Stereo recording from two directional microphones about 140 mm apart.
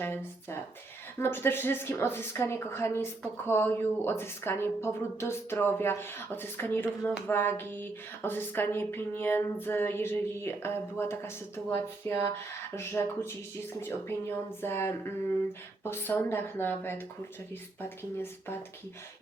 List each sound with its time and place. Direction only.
0.0 s a woman's voice: 15° left (ahead or behind)